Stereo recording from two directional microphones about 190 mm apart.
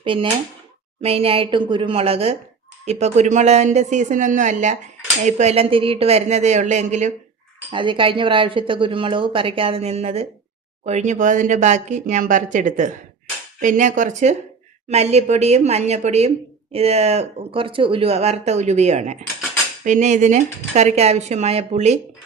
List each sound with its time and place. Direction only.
0.0 s speech: 25° right (ahead or behind)
7.7 s speech: 25° right (ahead or behind)